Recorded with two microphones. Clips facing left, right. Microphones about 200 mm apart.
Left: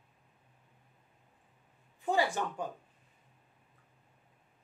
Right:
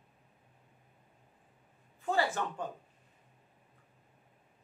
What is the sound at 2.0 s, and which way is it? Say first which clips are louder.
Speech: left 1 dB; 15° left (ahead or behind).